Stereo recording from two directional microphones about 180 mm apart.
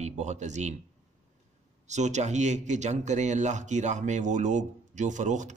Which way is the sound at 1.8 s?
40° right (ahead or behind).